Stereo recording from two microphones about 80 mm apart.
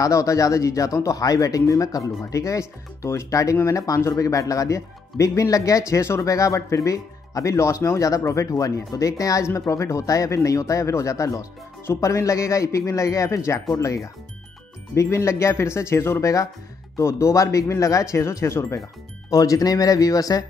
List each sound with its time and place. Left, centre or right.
0.0 s speech: left
19.3 s speech: left